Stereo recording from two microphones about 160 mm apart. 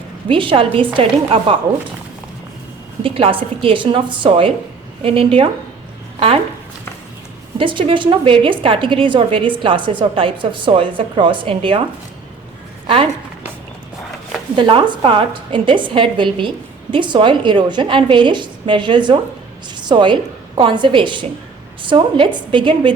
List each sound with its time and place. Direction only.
0.3 s a woman's voice: 30° right (ahead or behind)
3.0 s a woman's voice: 35° right (ahead or behind)
7.6 s a woman's voice: 30° right (ahead or behind)
14.5 s a woman's voice: 30° right (ahead or behind)